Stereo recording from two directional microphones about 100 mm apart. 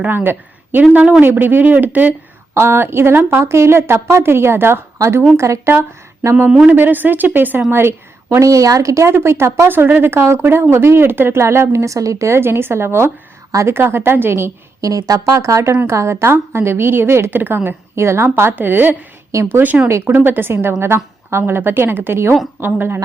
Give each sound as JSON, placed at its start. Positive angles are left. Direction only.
{"t": 0.0, "sound": "a woman's voice", "side_deg": -20}
{"t": 6.5, "sound": "speech", "side_deg": -10}
{"t": 6.7, "sound": "a woman's voice", "side_deg": -20}